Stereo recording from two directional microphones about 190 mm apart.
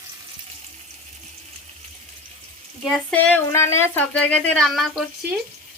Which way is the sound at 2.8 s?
5° left (ahead or behind).